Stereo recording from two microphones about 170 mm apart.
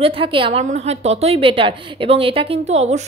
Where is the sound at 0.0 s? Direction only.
30° right (ahead or behind).